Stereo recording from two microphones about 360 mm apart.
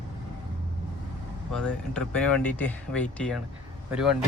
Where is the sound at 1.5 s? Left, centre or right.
Centre.